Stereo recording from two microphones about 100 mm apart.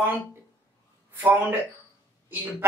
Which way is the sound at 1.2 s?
15° right (ahead or behind).